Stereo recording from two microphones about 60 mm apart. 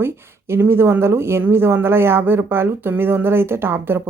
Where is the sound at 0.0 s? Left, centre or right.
Right.